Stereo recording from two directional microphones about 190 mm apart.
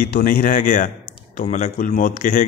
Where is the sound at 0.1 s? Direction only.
45° left (ahead or behind).